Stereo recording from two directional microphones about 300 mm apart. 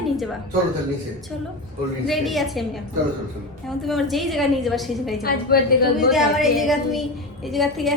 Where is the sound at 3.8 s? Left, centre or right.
Centre.